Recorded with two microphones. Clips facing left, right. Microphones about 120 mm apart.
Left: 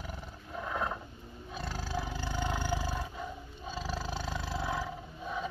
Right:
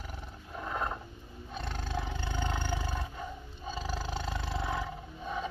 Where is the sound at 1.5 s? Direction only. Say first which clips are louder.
Even; 5° left (ahead or behind).